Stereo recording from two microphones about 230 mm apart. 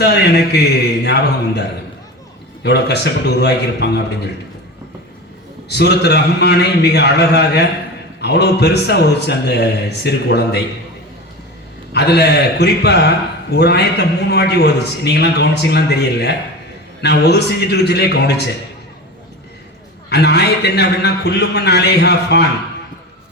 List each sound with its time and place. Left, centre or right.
0.0 s a man's voice: left
2.6 s a man's voice: left
5.6 s a man's voice: left
11.9 s a man's voice: left
20.1 s a man's voice: left